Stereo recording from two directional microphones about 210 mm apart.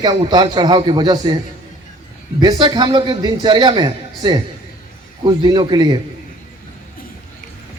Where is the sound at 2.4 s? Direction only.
20° right (ahead or behind).